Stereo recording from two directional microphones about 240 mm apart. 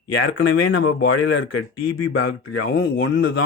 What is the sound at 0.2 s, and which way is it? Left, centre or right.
Speech, left.